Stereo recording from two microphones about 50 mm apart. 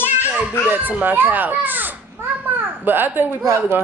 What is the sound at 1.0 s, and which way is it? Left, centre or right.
Speech, right.